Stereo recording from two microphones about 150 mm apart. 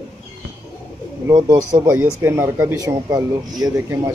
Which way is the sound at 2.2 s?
15° right (ahead or behind).